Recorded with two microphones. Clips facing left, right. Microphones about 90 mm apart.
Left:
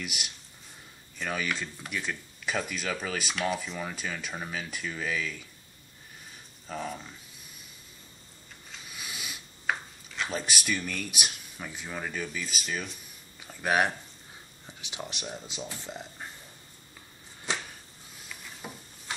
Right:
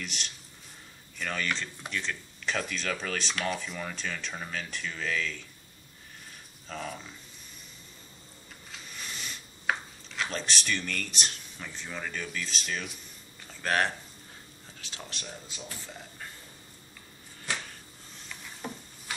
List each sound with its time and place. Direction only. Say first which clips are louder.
0.0 s speech: left 1 dB; 10° left (ahead or behind)
6.7 s speech: left 2 dB; 5° left (ahead or behind)
8.6 s a sound: even; 5° left (ahead or behind)
13.4 s speech: left 2 dB; 10° left (ahead or behind)
17.5 s a sound: left 2 dB; 20° left (ahead or behind)
18.1 s stir: even; 5° left (ahead or behind)